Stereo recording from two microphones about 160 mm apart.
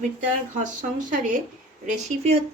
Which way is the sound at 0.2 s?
50° right (ahead or behind).